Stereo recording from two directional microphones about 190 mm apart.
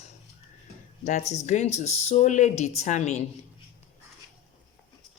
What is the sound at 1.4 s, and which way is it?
Speech, 40° left (ahead or behind).